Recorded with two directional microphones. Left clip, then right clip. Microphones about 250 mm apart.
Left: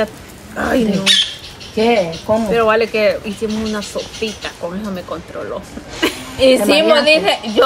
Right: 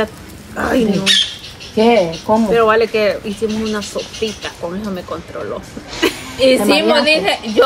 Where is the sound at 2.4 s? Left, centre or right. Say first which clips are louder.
Right 2 dB; centre.